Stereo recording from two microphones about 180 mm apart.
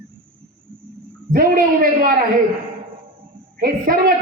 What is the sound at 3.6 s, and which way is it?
Speech, 55° right (ahead or behind).